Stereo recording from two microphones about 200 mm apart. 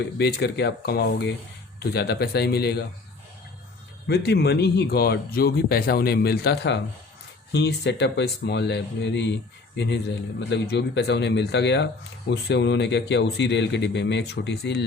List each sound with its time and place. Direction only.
0.2 s speech: 55° left (ahead or behind)
4.0 s a man's voice: 55° left (ahead or behind)